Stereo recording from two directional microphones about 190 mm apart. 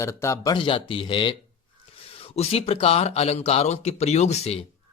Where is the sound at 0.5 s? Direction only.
25° left (ahead or behind).